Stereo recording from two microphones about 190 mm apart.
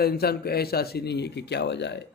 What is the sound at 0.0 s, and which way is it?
Speech, 55° left (ahead or behind).